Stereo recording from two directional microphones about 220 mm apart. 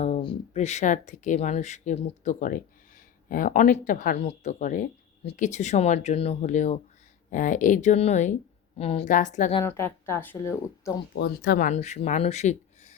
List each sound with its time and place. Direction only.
0.0 s speech: 25° left (ahead or behind)
9.6 s a woman's voice: 10° left (ahead or behind)
11.1 s speech: 50° left (ahead or behind)
11.7 s speech: 30° left (ahead or behind)